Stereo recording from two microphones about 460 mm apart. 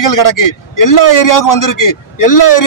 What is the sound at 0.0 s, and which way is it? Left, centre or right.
A man's voice, left.